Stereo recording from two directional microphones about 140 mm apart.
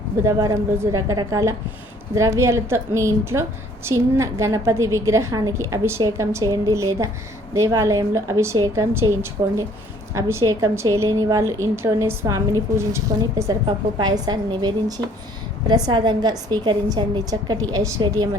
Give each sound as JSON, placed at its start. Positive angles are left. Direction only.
{"t": 0.2, "sound": "a woman's voice", "side_deg": -20}
{"t": 10.2, "sound": "a woman's voice", "side_deg": -20}
{"t": 14.0, "sound": "a woman's voice", "side_deg": -30}